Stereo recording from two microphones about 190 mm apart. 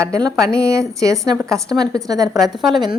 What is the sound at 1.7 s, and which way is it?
Speech, 20° right (ahead or behind).